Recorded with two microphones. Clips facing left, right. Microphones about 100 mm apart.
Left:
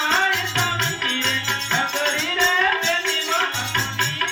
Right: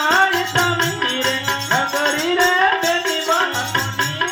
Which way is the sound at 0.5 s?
55° right (ahead or behind).